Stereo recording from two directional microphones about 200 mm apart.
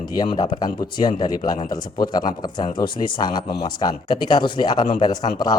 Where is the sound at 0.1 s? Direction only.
20° left (ahead or behind).